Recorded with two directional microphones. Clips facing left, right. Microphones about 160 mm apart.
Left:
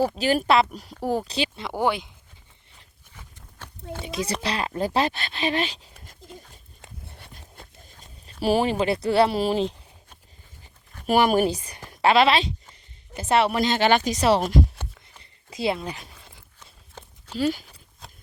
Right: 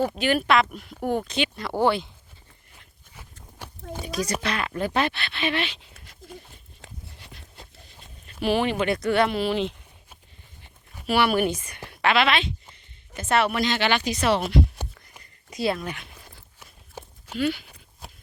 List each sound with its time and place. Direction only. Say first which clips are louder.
0.2 s speech: even; 35° left (ahead or behind)
1.0 s speech: even; 5° left (ahead or behind)
1.3 s speech: right 1 dB; 35° left (ahead or behind)
1.6 s speech: right 3 dB; 15° left (ahead or behind)
3.1 s a sound: right 2 dB; 10° right (ahead or behind)
4.0 s speech: right 1 dB; 25° left (ahead or behind)
7.1 s a sound: left 1 dB; 50° left (ahead or behind)
11.0 s speech: left 2 dB; 45° left (ahead or behind)
13.7 s speech: left 4 dB; 40° left (ahead or behind)
15.2 s a sound: even; 25° left (ahead or behind)
17.0 s a sound: right 4 dB; 10° right (ahead or behind)
17.3 s speech: left 1 dB; 40° left (ahead or behind)